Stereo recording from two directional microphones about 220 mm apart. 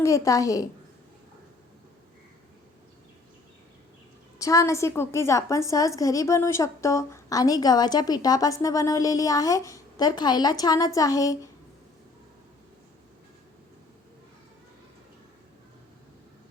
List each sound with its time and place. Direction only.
0.0 s a woman's voice: 15° left (ahead or behind)
4.4 s a woman's voice: 15° left (ahead or behind)